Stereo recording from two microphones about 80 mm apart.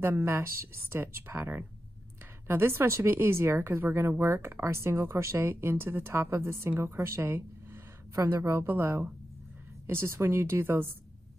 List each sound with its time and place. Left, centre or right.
0.0 s speech: right
8.1 s a woman's voice: right